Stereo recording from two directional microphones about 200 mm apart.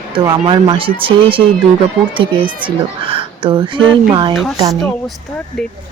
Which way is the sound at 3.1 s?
25° right (ahead or behind).